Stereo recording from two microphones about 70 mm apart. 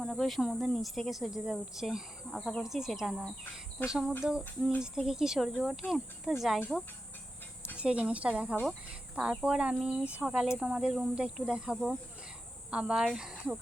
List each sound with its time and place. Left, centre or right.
0.0 s speech: centre
7.8 s speech: centre